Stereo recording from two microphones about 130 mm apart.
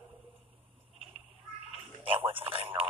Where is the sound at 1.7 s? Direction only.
45° right (ahead or behind).